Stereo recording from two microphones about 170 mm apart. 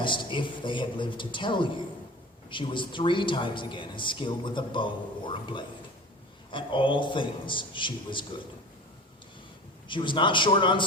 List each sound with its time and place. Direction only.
0.0 s speech: 30° left (ahead or behind)
9.9 s speech: 30° left (ahead or behind)